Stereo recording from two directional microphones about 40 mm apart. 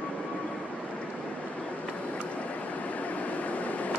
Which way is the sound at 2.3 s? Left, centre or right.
Left.